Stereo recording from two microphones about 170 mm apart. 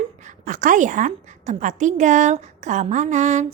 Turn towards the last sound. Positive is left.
turn(degrees=-45)  # may be behind; listen again after turning